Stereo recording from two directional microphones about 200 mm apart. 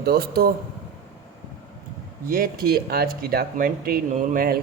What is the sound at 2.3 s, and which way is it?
Speech, 45° right (ahead or behind).